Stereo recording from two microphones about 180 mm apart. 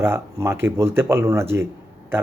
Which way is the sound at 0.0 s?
15° right (ahead or behind).